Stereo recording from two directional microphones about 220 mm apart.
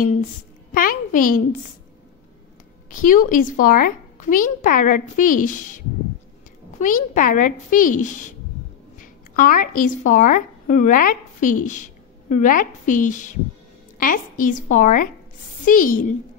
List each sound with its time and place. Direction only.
0.7 s a child's voice: 40° left (ahead or behind)
2.9 s a child's voice: 35° left (ahead or behind)